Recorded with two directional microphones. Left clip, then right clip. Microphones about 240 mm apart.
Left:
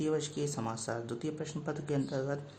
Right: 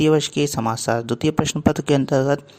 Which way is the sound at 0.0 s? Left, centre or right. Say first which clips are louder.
Right 16 dB; right.